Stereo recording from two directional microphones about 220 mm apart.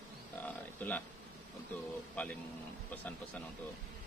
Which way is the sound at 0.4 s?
5° left (ahead or behind).